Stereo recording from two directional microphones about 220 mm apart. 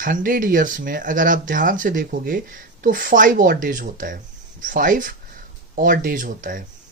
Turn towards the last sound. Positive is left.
turn(degrees=-40)  # may be behind; listen again after turning